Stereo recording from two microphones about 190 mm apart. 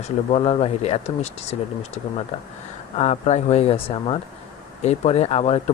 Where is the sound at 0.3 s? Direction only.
30° left (ahead or behind).